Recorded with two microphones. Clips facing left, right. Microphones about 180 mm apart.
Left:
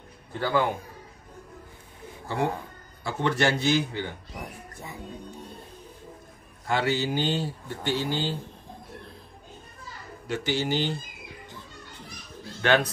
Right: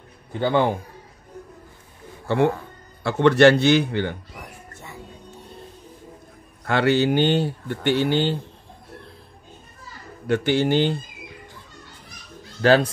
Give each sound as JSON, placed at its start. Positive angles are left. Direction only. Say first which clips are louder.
{"t": 0.3, "sound": "a man's voice", "louder": "right 5 dB", "side_deg": -25}
{"t": 2.2, "sound": "speech", "louder": "right 8 dB", "side_deg": -70}
{"t": 6.6, "sound": "speech", "louder": "right 7 dB", "side_deg": -65}
{"t": 10.2, "sound": "speech", "louder": "right 8 dB", "side_deg": -60}
{"t": 12.6, "sound": "a man's voice", "louder": "right 6 dB", "side_deg": -35}